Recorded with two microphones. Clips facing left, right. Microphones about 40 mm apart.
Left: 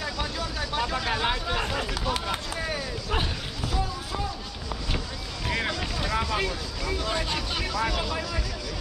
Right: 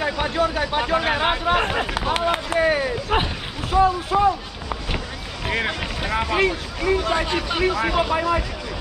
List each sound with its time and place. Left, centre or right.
0.0 s vehicle: right
3.7 s a sound: right
5.5 s speech: right